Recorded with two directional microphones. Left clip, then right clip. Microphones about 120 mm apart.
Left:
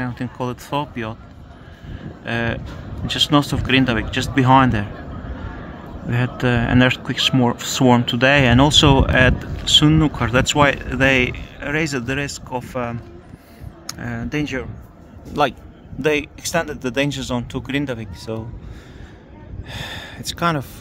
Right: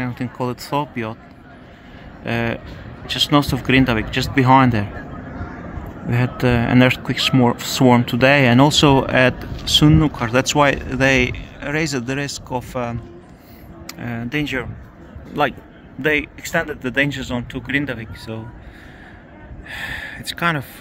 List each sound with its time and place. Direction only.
0.0 s speech: 10° right (ahead or behind)
2.2 s speech: centre (ahead or behind)
6.0 s speech: 5° right (ahead or behind)
16.0 s speech: 25° left (ahead or behind)
19.8 s speech: 35° left (ahead or behind)